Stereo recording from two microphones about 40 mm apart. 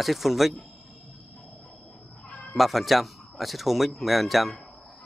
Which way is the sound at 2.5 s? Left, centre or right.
Centre.